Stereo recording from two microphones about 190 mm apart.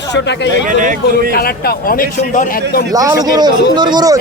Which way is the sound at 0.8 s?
45° right (ahead or behind).